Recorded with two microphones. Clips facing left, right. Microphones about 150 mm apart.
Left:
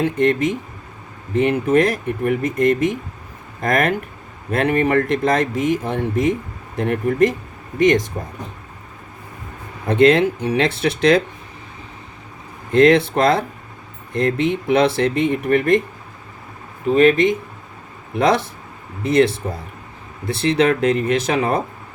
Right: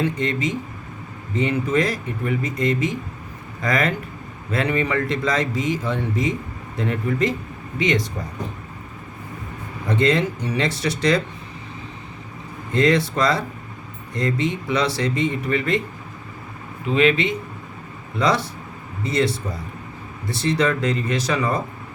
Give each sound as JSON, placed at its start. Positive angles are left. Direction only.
{"t": 0.0, "sound": "speech", "side_deg": 55}
{"t": 9.8, "sound": "speech", "side_deg": 55}
{"t": 12.7, "sound": "speech", "side_deg": 55}
{"t": 16.9, "sound": "speech", "side_deg": 45}